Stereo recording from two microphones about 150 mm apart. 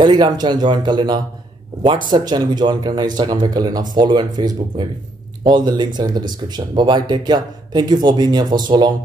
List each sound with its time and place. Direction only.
0.0 s speech: 30° right (ahead or behind)